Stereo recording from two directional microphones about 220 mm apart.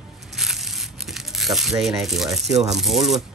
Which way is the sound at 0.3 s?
Centre (ahead or behind).